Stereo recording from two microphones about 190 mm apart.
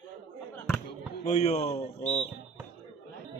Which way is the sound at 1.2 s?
35° left (ahead or behind).